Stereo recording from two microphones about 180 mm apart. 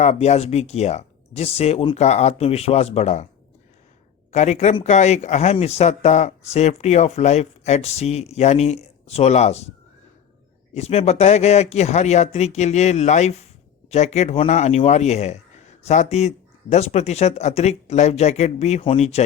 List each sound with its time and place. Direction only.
0.0 s speech: 35° left (ahead or behind)
4.3 s speech: 40° left (ahead or behind)
10.8 s speech: 35° left (ahead or behind)